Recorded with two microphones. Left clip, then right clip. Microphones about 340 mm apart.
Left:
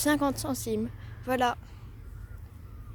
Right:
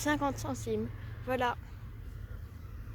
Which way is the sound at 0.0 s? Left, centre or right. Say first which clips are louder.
Left 5 dB; left.